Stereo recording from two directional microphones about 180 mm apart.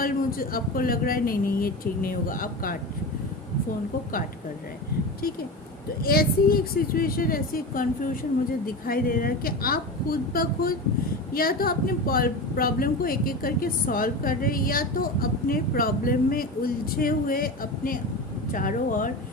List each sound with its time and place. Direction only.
0.0 s a woman's voice: 55° left (ahead or behind)
6.0 s a woman's voice: 55° left (ahead or behind)